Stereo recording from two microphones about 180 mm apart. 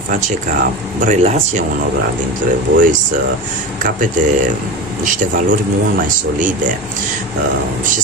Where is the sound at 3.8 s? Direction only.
45° right (ahead or behind).